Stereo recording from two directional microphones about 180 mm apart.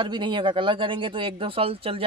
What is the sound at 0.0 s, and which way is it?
Speech, 25° right (ahead or behind).